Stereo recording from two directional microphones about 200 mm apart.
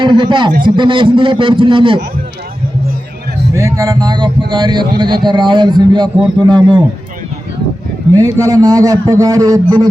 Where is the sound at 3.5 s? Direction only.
15° right (ahead or behind).